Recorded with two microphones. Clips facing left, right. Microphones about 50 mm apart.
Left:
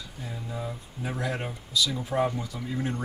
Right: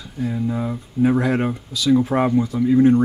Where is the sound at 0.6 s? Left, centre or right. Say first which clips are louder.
Right 14 dB; right.